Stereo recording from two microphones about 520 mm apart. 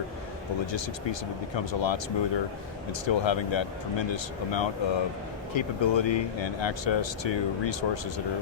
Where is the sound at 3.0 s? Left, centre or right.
Left.